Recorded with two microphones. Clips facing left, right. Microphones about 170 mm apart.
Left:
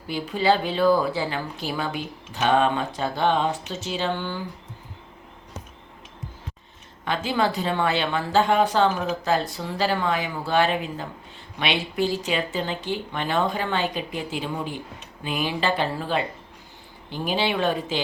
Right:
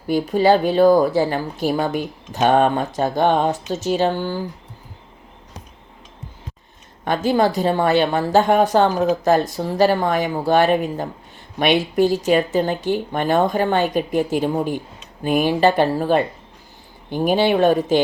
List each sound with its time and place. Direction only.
0.1 s speech: 45° right (ahead or behind)
7.0 s speech: 45° right (ahead or behind)